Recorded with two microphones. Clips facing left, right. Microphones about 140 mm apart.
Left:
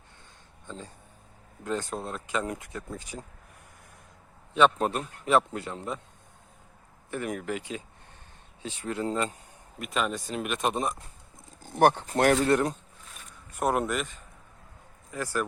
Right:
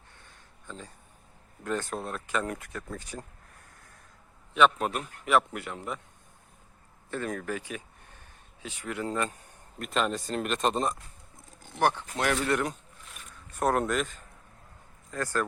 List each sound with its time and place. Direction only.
1.6 s speech: 20° left (ahead or behind)
4.5 s speech: 30° left (ahead or behind)
7.1 s speech: 15° left (ahead or behind)
9.7 s speech: 5° left (ahead or behind)
11.6 s speech: 50° left (ahead or behind)
12.3 s speech: 35° left (ahead or behind)
13.6 s speech: 5° left (ahead or behind)